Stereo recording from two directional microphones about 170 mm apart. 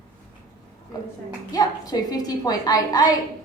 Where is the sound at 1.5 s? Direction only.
25° left (ahead or behind).